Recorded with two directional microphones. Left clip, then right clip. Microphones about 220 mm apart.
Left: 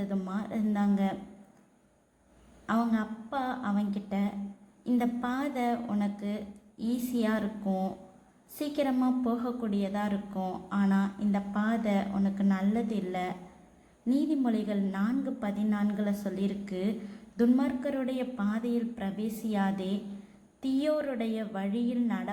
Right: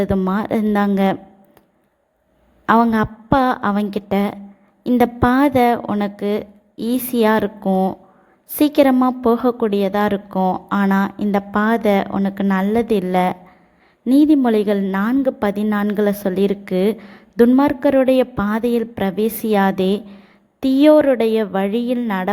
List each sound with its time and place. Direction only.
0.0 s a woman's voice: 45° right (ahead or behind)
2.6 s a woman's voice: 45° right (ahead or behind)